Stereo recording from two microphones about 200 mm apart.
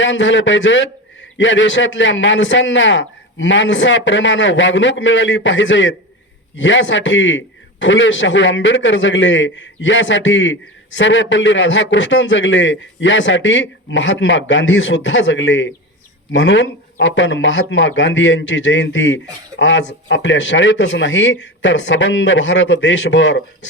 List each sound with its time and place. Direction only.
0.0 s a man's voice: 70° left (ahead or behind)